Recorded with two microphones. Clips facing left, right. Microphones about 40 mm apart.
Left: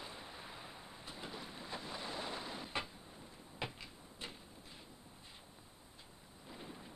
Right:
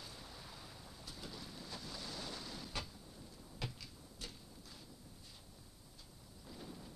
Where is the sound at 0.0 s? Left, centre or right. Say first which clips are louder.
Left 4 dB; left.